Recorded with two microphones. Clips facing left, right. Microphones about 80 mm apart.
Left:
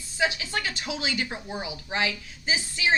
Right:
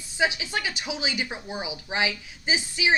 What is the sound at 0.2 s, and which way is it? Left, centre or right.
Speech, centre.